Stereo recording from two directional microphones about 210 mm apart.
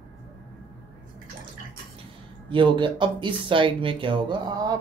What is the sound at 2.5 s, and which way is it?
Speech, 25° right (ahead or behind).